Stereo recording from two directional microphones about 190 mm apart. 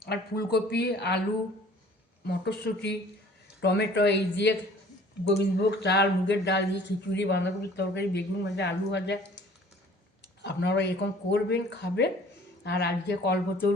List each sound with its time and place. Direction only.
0.0 s speech: 55° left (ahead or behind)
2.2 s speech: 60° left (ahead or behind)
10.4 s speech: 65° left (ahead or behind)